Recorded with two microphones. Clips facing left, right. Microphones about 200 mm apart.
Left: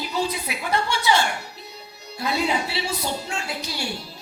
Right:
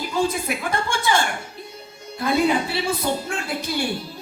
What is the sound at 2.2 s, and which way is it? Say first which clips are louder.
A woman's voice: right 5 dB; 50° right (ahead or behind).